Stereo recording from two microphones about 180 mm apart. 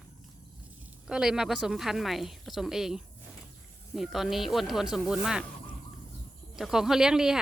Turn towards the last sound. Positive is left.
turn(degrees=-5)  # may be behind; listen again after turning